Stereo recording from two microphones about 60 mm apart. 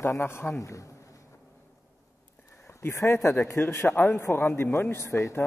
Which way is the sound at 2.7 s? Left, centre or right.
Left.